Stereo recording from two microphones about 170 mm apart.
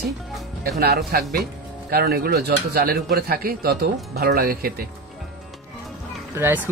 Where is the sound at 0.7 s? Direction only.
65° right (ahead or behind).